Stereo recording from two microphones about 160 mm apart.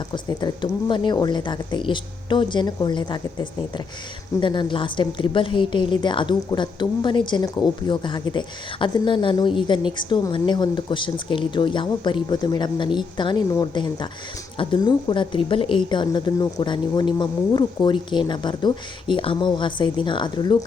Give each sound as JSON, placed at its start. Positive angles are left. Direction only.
{"t": 0.1, "sound": "a woman's voice", "side_deg": 25}